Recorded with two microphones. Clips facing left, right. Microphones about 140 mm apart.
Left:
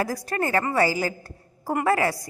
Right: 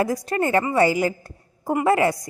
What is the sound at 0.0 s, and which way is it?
A woman's voice, 20° right (ahead or behind).